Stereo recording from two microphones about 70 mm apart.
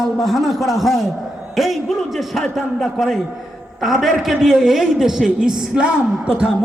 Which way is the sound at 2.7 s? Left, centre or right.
Centre.